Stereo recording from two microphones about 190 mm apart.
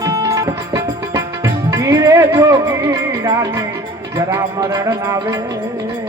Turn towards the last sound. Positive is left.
turn(degrees=-15)  # may be behind; listen again after turning